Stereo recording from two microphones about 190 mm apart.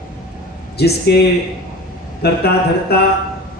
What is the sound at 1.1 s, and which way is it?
Speech, 60° left (ahead or behind).